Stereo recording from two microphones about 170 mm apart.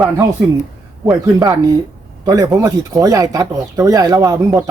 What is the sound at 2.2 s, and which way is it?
Speech, 20° right (ahead or behind).